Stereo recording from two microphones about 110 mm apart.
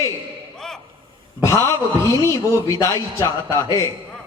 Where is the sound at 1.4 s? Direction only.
25° left (ahead or behind).